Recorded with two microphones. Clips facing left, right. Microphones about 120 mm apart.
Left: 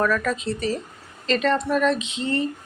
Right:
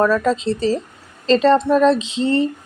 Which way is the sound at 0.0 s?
25° right (ahead or behind).